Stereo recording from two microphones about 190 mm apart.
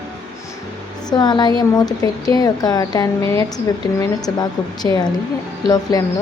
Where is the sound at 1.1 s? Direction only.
20° left (ahead or behind).